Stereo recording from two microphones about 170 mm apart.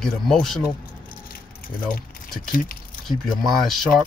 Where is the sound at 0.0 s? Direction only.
5° left (ahead or behind).